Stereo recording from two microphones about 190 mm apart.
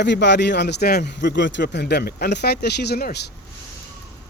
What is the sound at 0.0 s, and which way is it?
A man's voice, 65° left (ahead or behind).